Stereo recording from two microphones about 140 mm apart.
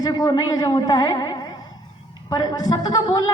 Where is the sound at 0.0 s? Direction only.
30° left (ahead or behind).